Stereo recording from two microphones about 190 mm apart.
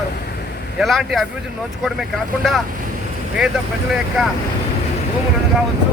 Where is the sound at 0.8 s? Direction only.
Centre (ahead or behind).